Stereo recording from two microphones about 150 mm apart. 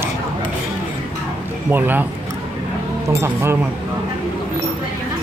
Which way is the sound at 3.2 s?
15° right (ahead or behind).